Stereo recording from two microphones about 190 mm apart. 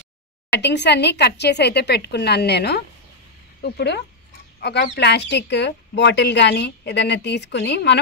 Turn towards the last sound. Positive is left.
turn(degrees=65)  # may be behind; listen again after turning